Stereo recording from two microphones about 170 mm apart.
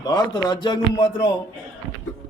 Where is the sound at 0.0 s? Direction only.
25° left (ahead or behind).